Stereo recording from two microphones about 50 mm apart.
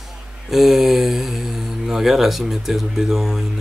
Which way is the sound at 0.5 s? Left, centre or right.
Centre.